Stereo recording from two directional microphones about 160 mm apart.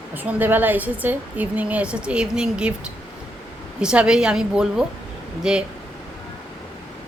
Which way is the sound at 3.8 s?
5° right (ahead or behind).